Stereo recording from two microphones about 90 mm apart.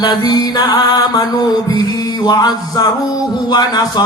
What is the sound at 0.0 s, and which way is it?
Music, 50° left (ahead or behind).